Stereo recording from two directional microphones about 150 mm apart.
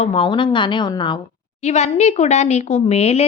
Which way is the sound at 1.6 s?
45° left (ahead or behind).